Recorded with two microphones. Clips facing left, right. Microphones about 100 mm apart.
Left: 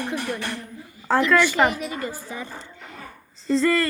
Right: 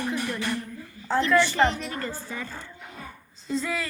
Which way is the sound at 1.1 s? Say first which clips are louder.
Left 3 dB; 90° left.